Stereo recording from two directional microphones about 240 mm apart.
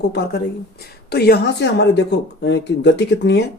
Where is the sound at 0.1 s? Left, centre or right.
Left.